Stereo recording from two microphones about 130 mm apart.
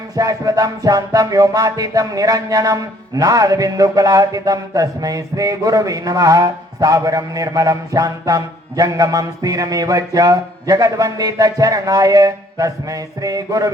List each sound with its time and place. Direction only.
0.2 s music: 25° right (ahead or behind)